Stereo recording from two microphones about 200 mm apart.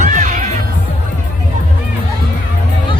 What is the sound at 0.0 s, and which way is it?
Music, 40° right (ahead or behind).